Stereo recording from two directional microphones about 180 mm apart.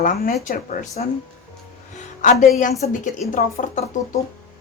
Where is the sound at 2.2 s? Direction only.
45° left (ahead or behind).